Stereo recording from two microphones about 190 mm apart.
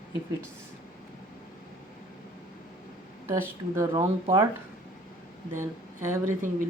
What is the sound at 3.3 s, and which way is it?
Speech, 15° right (ahead or behind).